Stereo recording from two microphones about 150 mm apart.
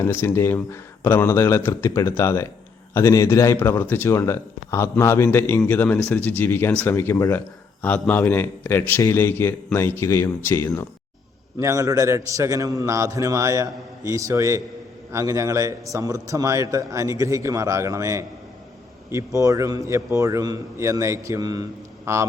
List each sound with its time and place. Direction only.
0.0 s speech: 15° left (ahead or behind)
11.6 s a man's voice: 20° right (ahead or behind)